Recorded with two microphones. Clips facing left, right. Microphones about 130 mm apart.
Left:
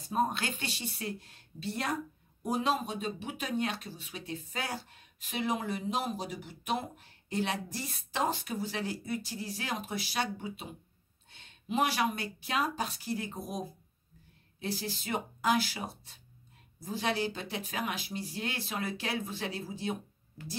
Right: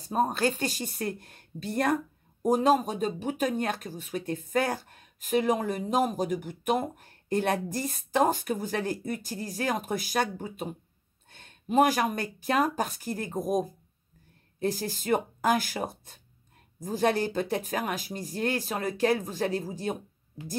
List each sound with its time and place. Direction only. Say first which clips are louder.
0.0 s speech: right 5 dB; 40° right (ahead or behind)
20.4 s speech: right 4 dB; 15° right (ahead or behind)